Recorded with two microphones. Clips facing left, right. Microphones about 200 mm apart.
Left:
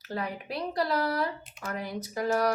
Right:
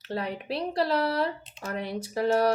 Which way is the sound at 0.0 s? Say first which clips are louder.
Right 2 dB; 30° right (ahead or behind).